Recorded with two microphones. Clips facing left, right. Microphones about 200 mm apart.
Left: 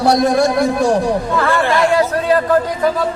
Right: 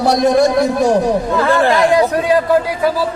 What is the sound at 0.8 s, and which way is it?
A man's voice, 20° right (ahead or behind).